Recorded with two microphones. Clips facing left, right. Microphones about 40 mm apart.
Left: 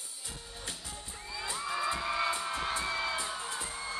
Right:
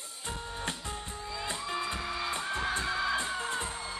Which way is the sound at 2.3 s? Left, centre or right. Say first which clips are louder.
Right 1 dB; right.